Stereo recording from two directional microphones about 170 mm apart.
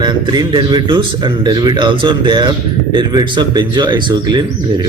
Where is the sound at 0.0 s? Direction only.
25° right (ahead or behind).